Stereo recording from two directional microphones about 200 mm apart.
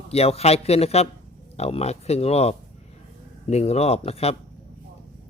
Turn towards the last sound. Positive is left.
turn(degrees=30)  # may be behind; listen again after turning